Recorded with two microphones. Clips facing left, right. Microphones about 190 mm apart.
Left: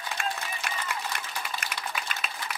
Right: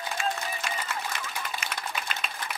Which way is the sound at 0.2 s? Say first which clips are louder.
Right 3 dB; 55° left (ahead or behind).